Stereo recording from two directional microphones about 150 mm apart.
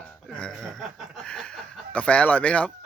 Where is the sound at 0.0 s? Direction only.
5° left (ahead or behind).